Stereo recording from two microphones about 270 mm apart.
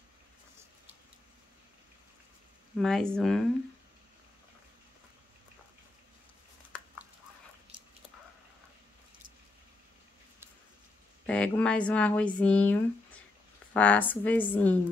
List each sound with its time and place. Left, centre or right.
2.8 s speech: centre
7.7 s a sound: centre
11.2 s speech: centre
13.7 s a woman's voice: centre